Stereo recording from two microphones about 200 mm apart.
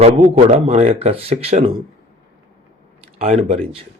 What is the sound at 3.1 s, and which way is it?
Speech, 35° right (ahead or behind).